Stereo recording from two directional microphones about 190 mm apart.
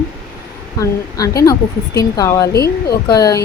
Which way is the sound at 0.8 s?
20° left (ahead or behind).